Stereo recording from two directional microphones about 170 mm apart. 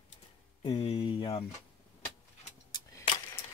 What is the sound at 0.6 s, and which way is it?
Speech, 35° left (ahead or behind).